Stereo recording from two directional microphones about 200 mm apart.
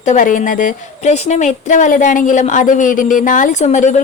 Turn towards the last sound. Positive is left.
turn(degrees=35)  # may be behind; listen again after turning